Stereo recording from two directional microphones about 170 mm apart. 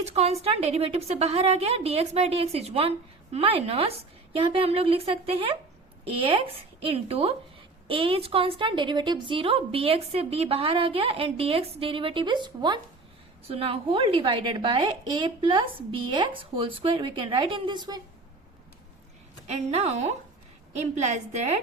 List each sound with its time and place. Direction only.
0.0 s a woman's voice: 40° right (ahead or behind)
19.5 s a woman's voice: 40° right (ahead or behind)